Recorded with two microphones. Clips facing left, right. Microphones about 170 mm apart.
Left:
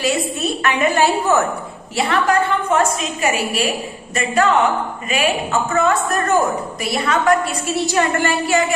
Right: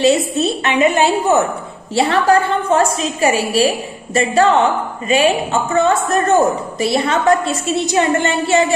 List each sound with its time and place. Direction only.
0.0 s a woman's voice: 25° right (ahead or behind)
2.0 s a woman's voice: 30° right (ahead or behind)